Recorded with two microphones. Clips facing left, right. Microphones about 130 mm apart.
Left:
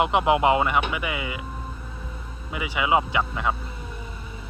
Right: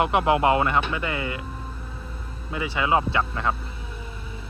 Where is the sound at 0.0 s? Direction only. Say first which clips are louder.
Even; 20° left (ahead or behind).